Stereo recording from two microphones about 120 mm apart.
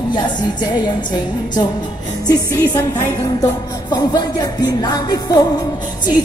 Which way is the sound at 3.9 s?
35° left (ahead or behind).